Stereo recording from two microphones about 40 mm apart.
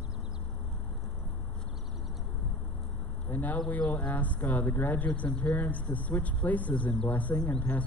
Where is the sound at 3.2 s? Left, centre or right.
Left.